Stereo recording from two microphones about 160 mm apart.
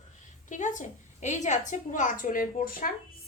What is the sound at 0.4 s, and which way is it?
A woman's voice, 50° left (ahead or behind).